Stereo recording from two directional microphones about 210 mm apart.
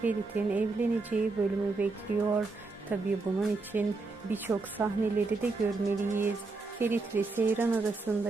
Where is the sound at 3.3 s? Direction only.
15° right (ahead or behind).